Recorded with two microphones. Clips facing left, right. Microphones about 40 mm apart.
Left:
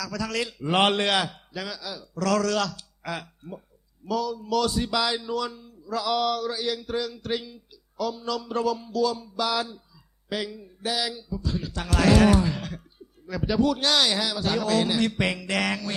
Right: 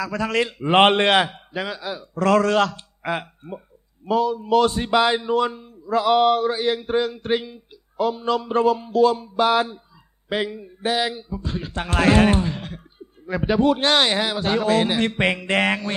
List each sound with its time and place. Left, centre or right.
0.0 s a man's voice: right